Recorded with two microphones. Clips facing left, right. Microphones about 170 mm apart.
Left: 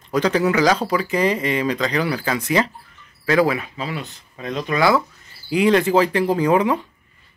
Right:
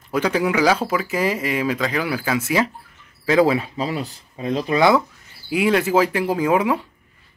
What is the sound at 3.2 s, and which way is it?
Speech, 20° right (ahead or behind).